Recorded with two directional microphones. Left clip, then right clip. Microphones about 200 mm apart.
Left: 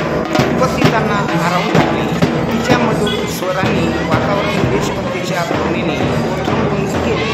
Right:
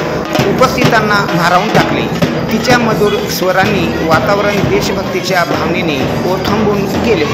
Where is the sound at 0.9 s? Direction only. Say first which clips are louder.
Right 5 dB; 25° right (ahead or behind).